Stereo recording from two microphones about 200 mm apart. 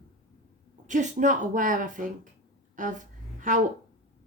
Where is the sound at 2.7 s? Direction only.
40° right (ahead or behind).